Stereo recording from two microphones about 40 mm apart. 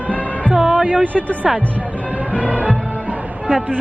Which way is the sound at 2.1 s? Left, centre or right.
Right.